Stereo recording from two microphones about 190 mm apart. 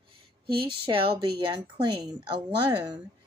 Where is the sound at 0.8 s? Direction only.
25° right (ahead or behind).